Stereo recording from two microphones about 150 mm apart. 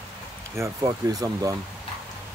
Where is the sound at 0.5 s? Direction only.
20° right (ahead or behind).